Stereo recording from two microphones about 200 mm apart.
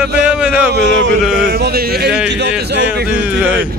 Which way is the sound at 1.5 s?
50° right (ahead or behind).